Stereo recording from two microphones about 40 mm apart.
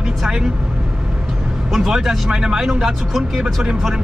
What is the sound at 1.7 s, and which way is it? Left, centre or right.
Speech, centre.